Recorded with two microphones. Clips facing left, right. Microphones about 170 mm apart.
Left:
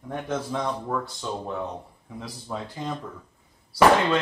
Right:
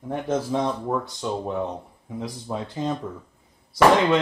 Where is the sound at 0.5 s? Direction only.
20° right (ahead or behind).